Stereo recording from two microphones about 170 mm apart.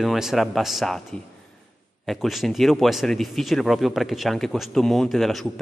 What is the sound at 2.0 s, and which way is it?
A man's voice, centre (ahead or behind).